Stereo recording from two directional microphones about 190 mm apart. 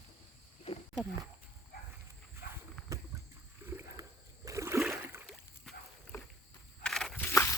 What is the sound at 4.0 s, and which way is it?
Rowboat, 20° right (ahead or behind).